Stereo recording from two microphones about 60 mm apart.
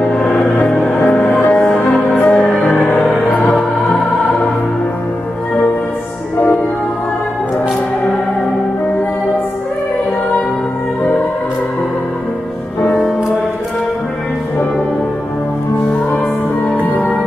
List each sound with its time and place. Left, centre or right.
0.0 s music: centre
16.8 s music: left